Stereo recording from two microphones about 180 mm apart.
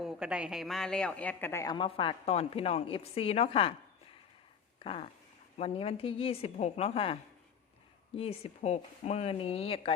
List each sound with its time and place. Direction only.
0.0 s speech: 5° right (ahead or behind); by 1.7 s 15° left (ahead or behind)
1.7 s a woman's voice: 30° left (ahead or behind)
4.8 s a sound: 30° left (ahead or behind)
5.5 s a woman's voice: 35° left (ahead or behind)